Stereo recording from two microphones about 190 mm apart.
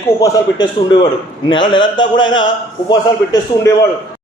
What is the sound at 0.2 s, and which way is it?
A man's voice, 20° left (ahead or behind).